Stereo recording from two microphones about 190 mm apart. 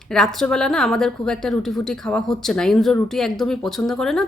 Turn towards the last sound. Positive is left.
turn(degrees=0)  # may be behind; listen again after turning